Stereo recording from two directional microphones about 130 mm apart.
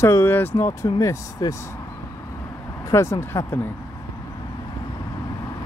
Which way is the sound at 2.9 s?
20° left (ahead or behind).